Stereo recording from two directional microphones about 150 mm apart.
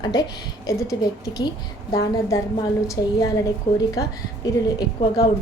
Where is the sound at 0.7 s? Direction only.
20° left (ahead or behind).